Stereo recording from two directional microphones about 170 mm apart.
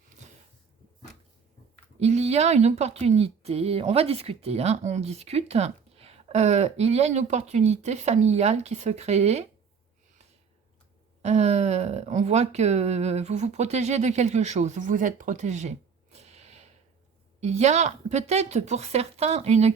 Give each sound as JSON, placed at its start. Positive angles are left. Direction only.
{"t": 2.0, "sound": "speech", "side_deg": -40}
{"t": 11.2, "sound": "speech", "side_deg": -40}
{"t": 16.1, "sound": "gasp", "side_deg": -40}
{"t": 17.4, "sound": "speech", "side_deg": -40}